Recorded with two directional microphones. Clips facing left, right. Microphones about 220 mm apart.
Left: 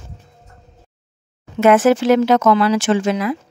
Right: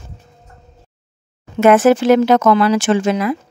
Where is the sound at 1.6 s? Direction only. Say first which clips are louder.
Right 2 dB; 50° right (ahead or behind).